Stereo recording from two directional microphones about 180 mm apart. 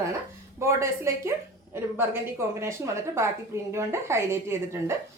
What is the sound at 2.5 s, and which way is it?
A woman's voice, 15° right (ahead or behind).